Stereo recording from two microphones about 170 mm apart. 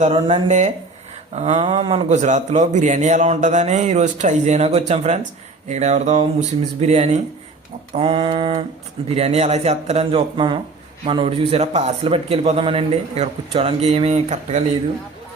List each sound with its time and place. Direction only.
0.0 s a man's voice: 35° right (ahead or behind)